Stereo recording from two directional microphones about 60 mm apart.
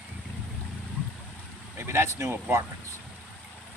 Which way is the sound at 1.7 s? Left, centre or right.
Right.